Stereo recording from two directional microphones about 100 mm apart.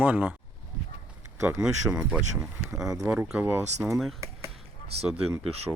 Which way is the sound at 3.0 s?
10° right (ahead or behind).